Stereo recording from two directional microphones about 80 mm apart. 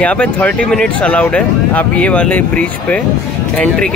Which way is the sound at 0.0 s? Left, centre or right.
Centre.